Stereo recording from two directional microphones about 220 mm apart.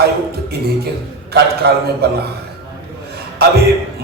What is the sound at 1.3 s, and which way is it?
Speech, 45° right (ahead or behind).